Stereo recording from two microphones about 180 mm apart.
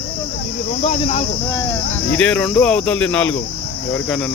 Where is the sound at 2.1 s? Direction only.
5° left (ahead or behind).